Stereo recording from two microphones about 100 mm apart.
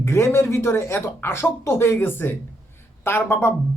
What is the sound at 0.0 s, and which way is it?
Speech, 25° left (ahead or behind).